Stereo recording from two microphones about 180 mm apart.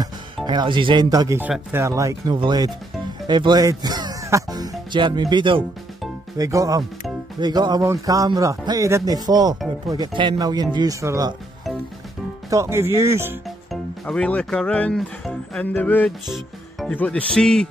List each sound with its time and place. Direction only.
0.5 s a man's voice: 25° right (ahead or behind)
12.4 s speech: 15° right (ahead or behind)
13.7 s speech: 5° left (ahead or behind)